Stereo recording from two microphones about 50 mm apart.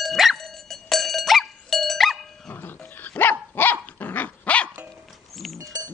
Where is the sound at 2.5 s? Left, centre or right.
Left.